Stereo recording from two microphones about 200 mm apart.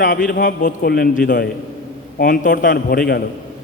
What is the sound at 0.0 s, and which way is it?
A man's voice, 45° left (ahead or behind).